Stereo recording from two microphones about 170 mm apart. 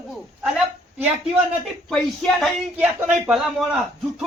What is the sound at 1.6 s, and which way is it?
Speech, 5° left (ahead or behind).